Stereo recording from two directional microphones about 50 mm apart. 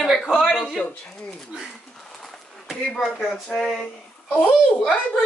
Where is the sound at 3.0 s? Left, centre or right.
Centre.